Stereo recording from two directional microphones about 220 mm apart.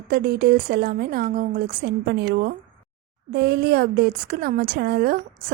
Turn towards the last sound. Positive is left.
turn(degrees=-45)  # may be behind; listen again after turning